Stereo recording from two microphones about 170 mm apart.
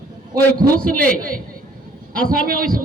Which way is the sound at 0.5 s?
55° right (ahead or behind).